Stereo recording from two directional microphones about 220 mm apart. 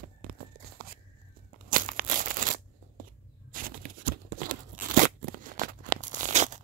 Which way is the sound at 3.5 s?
40° right (ahead or behind).